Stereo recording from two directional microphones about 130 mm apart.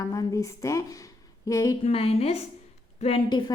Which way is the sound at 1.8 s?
50° left (ahead or behind).